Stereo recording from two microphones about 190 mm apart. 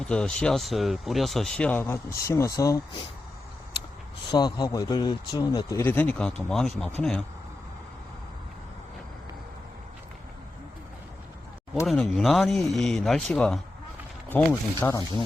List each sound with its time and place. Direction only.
0.0 s speech: 5° left (ahead or behind)
4.3 s speech: 20° left (ahead or behind); by 6.9 s 5° left (ahead or behind)
11.9 s speech: centre (ahead or behind)